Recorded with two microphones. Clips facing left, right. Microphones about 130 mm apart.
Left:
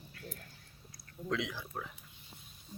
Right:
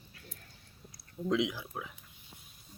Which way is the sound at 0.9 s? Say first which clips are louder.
Right 5 dB; 20° right (ahead or behind).